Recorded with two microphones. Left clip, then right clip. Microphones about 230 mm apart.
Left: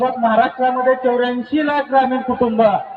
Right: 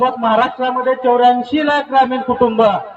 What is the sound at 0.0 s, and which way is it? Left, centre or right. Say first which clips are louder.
A man's voice: right 1 dB; right.